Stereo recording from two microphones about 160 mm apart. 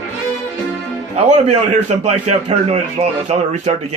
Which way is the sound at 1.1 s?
45° right (ahead or behind).